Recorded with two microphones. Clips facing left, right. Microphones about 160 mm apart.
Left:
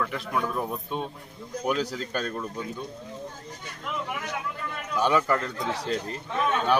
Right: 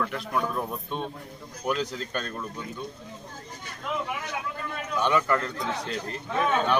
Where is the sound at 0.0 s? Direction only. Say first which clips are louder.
Even; centre (ahead or behind).